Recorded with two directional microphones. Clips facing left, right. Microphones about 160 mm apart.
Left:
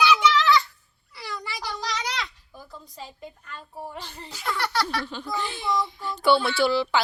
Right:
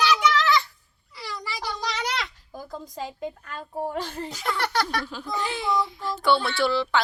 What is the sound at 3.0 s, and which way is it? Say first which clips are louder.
Speech: right 8 dB; 90° right.